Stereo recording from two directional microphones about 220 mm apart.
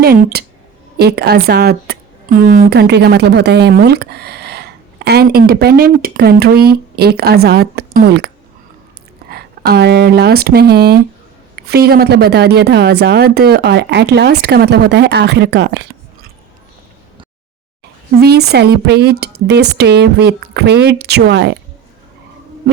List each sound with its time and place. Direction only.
0.0 s speech: 45° right (ahead or behind)
9.3 s speech: 45° right (ahead or behind)
18.2 s speech: 45° right (ahead or behind)